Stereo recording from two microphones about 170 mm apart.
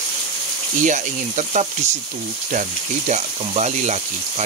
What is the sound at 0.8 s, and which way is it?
Speech, 45° right (ahead or behind).